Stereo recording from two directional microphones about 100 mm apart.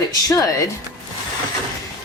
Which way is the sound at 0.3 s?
35° left (ahead or behind).